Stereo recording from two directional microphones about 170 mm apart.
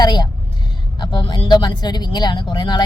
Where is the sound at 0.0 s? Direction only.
25° left (ahead or behind).